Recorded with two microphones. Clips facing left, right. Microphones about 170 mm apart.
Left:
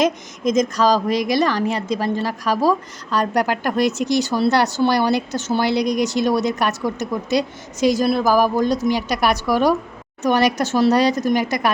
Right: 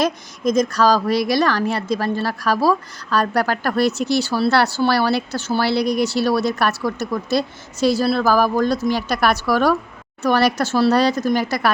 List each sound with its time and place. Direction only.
0.0 s speech: 15° left (ahead or behind)